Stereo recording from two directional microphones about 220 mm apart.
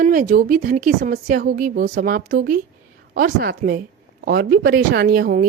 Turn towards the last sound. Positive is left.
turn(degrees=-40)  # may be behind; listen again after turning